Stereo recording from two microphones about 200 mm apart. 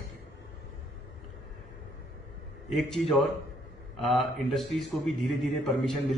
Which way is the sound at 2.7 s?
Centre (ahead or behind).